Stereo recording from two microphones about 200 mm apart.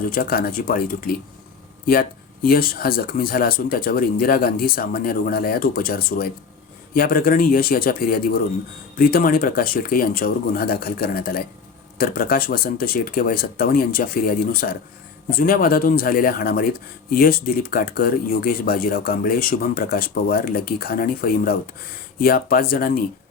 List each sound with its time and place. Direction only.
0.1 s speech: 45° left (ahead or behind)